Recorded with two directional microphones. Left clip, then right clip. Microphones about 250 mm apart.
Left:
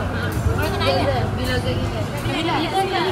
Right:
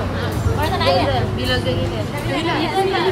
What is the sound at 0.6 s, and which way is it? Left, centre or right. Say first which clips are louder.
Vehicle: right 4 dB; centre.